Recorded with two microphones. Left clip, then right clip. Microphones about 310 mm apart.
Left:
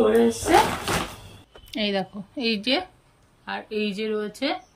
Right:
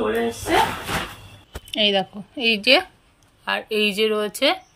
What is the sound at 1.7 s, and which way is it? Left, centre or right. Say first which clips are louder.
A woman's voice: right 7 dB; centre.